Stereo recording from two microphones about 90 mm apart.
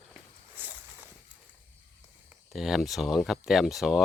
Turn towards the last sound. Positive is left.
turn(degrees=0)  # may be behind; listen again after turning